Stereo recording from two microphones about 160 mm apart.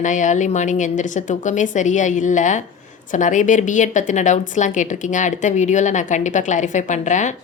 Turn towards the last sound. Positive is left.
turn(degrees=50)  # may be behind; listen again after turning